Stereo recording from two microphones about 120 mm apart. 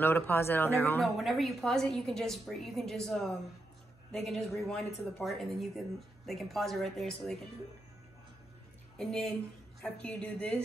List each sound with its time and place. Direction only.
0.0 s speech: 20° left (ahead or behind)
1.1 s a woman's voice: centre (ahead or behind)
8.9 s a woman's voice: 5° left (ahead or behind)